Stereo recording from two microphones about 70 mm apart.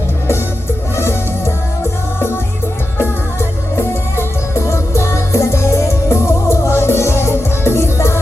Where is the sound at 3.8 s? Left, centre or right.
Left.